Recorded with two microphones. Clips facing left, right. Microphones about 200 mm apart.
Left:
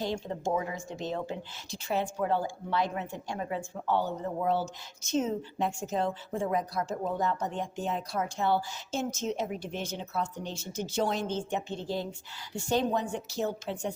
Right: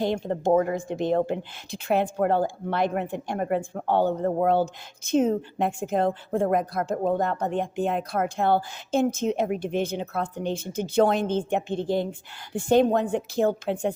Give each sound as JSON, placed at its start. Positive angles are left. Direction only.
{"t": 0.0, "sound": "a woman's voice", "side_deg": -55}